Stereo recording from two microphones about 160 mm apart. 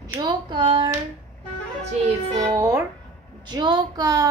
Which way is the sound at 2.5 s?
20° right (ahead or behind).